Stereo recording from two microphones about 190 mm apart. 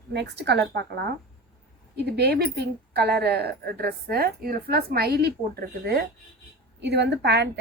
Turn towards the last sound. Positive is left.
turn(degrees=-65)  # may be behind; listen again after turning